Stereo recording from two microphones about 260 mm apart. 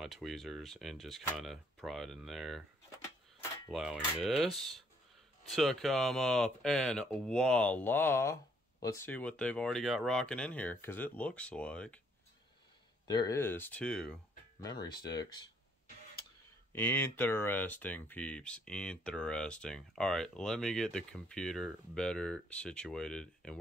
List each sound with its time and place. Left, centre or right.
0.0 s speech: centre
3.0 s clock: centre
3.7 s speech: centre
13.0 s speech: centre
14.6 s speech: centre
16.7 s speech: centre